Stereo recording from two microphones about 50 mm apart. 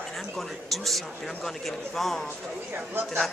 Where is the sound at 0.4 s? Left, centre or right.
Centre.